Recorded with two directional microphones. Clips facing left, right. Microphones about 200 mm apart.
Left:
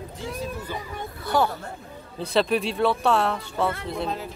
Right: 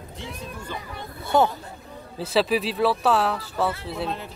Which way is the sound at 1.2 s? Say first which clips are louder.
Right 3 dB; 25° right (ahead or behind).